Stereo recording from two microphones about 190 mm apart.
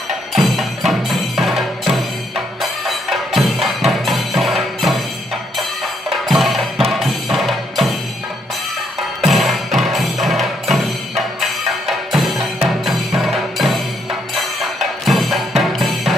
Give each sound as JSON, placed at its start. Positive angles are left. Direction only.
{"t": 0.3, "sound": "music", "side_deg": 0}
{"t": 5.5, "sound": "percussion", "side_deg": 0}
{"t": 9.2, "sound": "music", "side_deg": 0}